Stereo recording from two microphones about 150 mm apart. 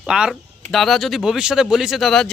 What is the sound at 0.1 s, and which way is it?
Speech, 5° right (ahead or behind).